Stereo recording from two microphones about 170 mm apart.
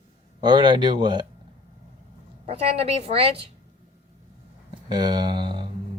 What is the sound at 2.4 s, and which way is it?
A woman's voice, 35° right (ahead or behind).